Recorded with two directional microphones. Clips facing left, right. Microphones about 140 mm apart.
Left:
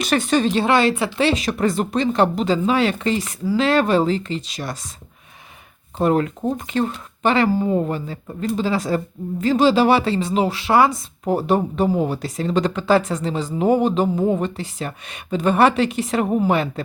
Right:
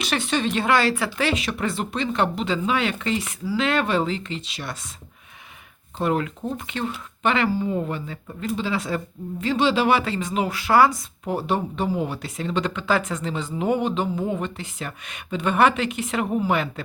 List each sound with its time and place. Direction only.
0.0 s speech: 45° left (ahead or behind)
6.0 s speech: 40° left (ahead or behind); by 11.0 s 25° left (ahead or behind)
11.3 s speech: 40° left (ahead or behind)